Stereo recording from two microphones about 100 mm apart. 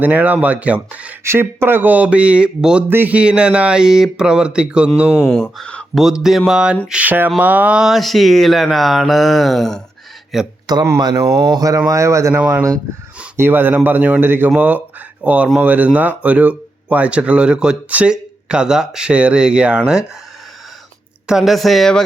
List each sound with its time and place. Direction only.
0.0 s speech: 15° right (ahead or behind)
1.2 s speech: 25° right (ahead or behind); by 4.9 s 10° right (ahead or behind)
5.2 s speech: 5° left (ahead or behind)
6.0 s speech: 5° right (ahead or behind)
10.7 s a man's voice: 40° right (ahead or behind); by 20.1 s 10° right (ahead or behind)
21.2 s speech: 5° right (ahead or behind)